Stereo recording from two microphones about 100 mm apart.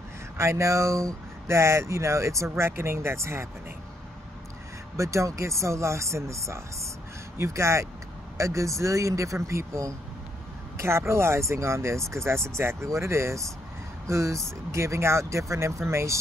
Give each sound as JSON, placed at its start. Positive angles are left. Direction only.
{"t": 0.4, "sound": "speech", "side_deg": -30}
{"t": 4.9, "sound": "speech", "side_deg": -30}